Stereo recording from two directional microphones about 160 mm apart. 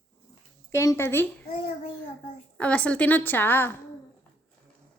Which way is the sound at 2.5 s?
5° left (ahead or behind).